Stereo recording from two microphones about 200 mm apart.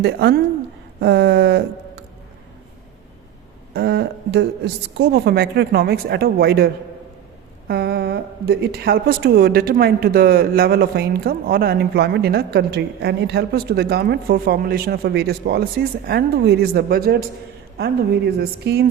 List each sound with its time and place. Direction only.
0.0 s speech: 55° right (ahead or behind)
1.0 s a sound: 55° right (ahead or behind)
3.8 s a woman's voice: 55° right (ahead or behind)
7.7 s a woman's voice: 50° right (ahead or behind)